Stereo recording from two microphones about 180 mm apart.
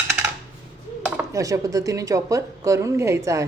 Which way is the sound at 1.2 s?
15° right (ahead or behind).